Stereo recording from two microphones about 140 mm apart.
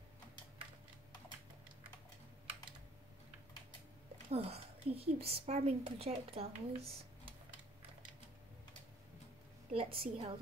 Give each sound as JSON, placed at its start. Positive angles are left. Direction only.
{"t": 4.3, "sound": "a woman's voice", "side_deg": -45}
{"t": 9.7, "sound": "a woman's voice", "side_deg": -40}